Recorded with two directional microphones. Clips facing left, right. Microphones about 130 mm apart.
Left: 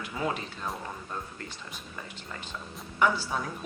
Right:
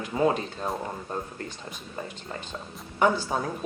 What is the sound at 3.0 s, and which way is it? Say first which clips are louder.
Speech: right 3 dB; 40° right (ahead or behind).